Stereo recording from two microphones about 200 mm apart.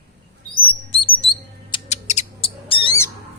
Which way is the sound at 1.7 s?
35° left (ahead or behind).